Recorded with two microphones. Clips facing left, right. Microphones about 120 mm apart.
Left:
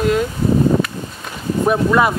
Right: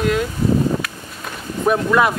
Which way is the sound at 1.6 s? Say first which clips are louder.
Left 1 dB; centre (ahead or behind).